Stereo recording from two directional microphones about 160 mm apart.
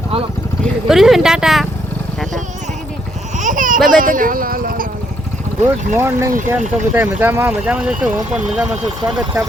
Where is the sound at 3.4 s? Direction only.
55° right (ahead or behind).